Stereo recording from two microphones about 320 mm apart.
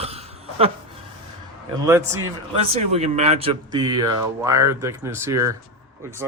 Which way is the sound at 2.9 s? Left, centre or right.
Centre.